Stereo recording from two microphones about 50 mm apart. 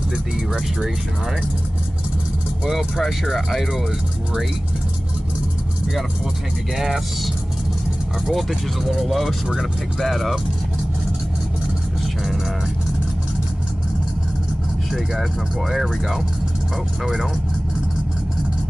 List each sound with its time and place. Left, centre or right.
2.7 s speech: centre
8.3 s speech: centre
15.7 s speech: centre